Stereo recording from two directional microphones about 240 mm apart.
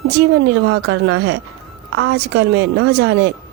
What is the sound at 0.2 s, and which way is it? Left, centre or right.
Speech, right.